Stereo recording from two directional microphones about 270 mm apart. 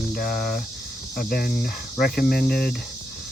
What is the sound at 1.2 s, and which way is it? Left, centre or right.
Speech, left.